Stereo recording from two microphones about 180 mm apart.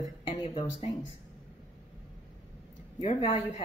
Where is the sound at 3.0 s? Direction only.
35° left (ahead or behind).